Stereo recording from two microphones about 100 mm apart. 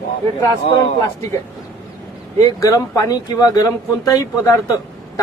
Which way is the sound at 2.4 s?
35° left (ahead or behind).